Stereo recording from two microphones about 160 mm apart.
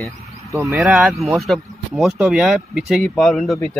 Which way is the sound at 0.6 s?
Centre (ahead or behind).